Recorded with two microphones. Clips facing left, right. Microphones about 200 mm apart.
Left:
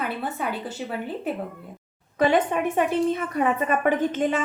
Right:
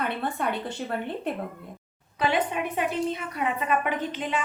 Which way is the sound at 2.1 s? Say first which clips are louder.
Left 5 dB; 45° left (ahead or behind).